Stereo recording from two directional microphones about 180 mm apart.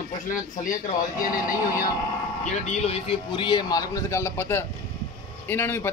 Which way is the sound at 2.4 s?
35° left (ahead or behind).